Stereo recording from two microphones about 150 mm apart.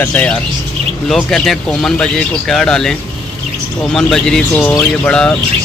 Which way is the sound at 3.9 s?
5° left (ahead or behind).